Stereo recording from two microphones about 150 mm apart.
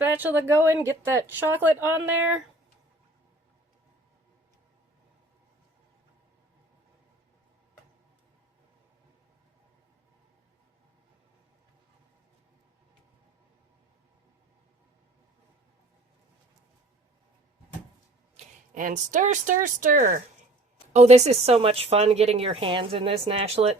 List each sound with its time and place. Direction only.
0.0 s speech: 15° right (ahead or behind)
18.3 s speech: 60° right (ahead or behind)
20.9 s speech: 50° right (ahead or behind)